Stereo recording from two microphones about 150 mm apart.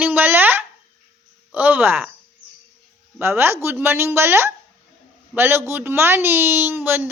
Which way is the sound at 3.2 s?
15° right (ahead or behind).